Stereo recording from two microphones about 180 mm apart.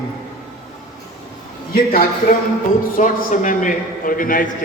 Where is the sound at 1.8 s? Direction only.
55° left (ahead or behind).